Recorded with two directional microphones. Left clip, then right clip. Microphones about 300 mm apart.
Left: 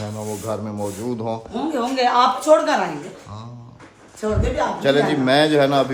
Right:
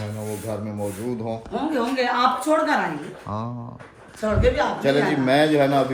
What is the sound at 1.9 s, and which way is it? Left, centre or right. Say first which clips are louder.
Speech: left 5 dB; centre.